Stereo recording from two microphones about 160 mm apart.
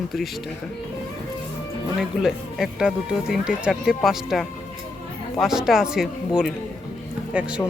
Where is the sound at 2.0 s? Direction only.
5° right (ahead or behind).